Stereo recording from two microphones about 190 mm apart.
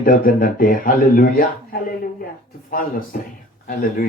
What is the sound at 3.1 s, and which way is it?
Speech, 50° left (ahead or behind).